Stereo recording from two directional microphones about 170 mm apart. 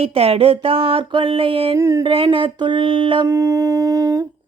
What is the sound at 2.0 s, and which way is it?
Speech, 30° right (ahead or behind).